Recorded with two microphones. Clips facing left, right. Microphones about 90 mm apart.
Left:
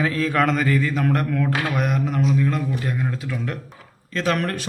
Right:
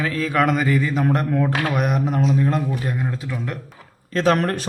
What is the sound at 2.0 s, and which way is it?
Speech, 35° right (ahead or behind).